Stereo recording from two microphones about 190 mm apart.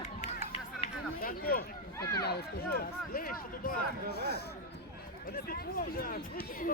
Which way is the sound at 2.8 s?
50° left (ahead or behind).